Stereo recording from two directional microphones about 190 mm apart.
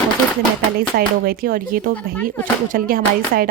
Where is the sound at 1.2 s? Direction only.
50° right (ahead or behind).